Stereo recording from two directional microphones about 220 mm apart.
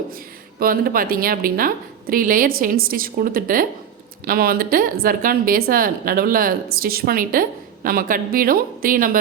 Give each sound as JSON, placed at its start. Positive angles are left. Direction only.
{"t": 0.6, "sound": "a woman's voice", "side_deg": -40}